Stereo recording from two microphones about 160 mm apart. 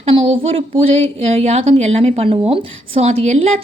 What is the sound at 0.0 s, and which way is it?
A woman's voice, 40° right (ahead or behind).